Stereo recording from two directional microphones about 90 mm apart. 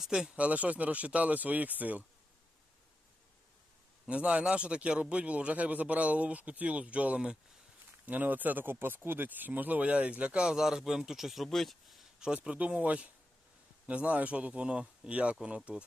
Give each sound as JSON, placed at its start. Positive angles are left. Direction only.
{"t": 0.0, "sound": "speech", "side_deg": -5}
{"t": 4.0, "sound": "speech", "side_deg": -15}